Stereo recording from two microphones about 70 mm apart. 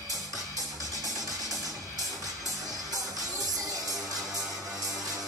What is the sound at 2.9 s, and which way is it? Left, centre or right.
Music, right.